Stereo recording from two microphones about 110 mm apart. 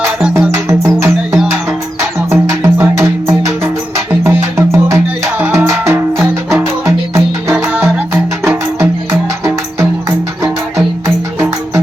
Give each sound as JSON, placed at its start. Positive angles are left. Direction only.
{"t": 0.3, "sound": "music", "side_deg": -25}
{"t": 7.5, "sound": "music", "side_deg": -10}